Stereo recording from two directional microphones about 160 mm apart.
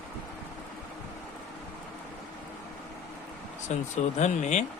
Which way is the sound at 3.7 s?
45° left (ahead or behind).